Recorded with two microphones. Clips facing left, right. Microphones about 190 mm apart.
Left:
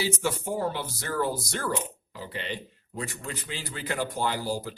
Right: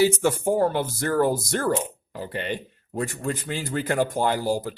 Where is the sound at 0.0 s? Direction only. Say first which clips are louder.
Right 9 dB; 50° right (ahead or behind).